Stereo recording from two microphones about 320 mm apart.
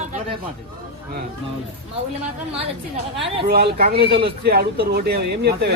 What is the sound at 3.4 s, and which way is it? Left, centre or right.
Speech, right.